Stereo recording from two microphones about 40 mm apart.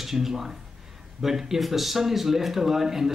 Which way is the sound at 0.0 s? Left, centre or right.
Centre.